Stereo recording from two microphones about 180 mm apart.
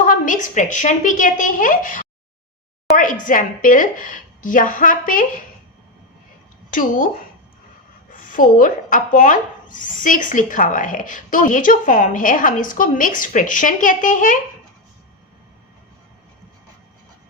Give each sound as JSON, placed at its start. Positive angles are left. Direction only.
{"t": 0.1, "sound": "speech", "side_deg": 45}
{"t": 6.7, "sound": "speech", "side_deg": 50}
{"t": 8.1, "sound": "speech", "side_deg": 50}